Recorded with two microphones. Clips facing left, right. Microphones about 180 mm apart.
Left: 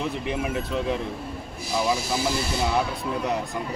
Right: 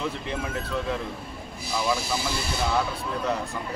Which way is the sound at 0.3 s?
15° left (ahead or behind).